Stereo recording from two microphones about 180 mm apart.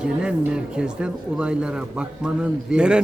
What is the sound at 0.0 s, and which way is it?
Speech, 5° right (ahead or behind).